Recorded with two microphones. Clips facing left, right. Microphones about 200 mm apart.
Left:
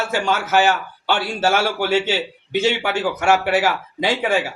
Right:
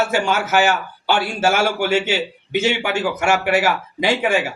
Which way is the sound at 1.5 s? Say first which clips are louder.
Even; 45° right (ahead or behind).